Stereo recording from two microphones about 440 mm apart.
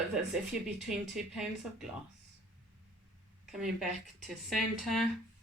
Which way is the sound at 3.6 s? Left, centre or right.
Centre.